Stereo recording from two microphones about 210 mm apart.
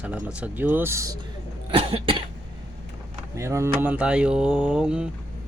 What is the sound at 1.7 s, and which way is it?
Cough, 25° right (ahead or behind).